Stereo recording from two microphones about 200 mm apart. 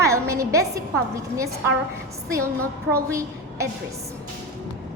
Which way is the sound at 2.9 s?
15° right (ahead or behind).